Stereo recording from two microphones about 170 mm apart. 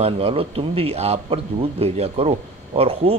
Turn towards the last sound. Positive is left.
turn(degrees=-35)  # may be behind; listen again after turning